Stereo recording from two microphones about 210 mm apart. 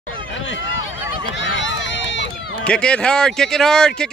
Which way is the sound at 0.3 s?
65° left (ahead or behind).